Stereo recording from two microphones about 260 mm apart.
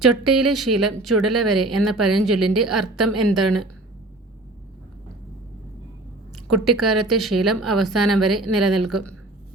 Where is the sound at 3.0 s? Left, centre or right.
Right.